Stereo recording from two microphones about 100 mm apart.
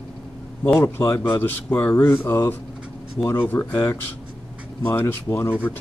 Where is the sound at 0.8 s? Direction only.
25° left (ahead or behind).